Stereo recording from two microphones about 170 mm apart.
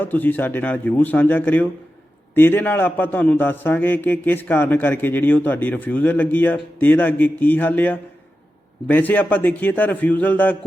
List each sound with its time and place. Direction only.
0.0 s a man's voice: 10° left (ahead or behind)